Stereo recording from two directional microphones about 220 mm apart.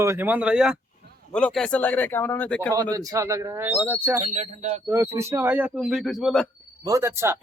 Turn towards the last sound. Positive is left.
turn(degrees=-10)  # may be behind; listen again after turning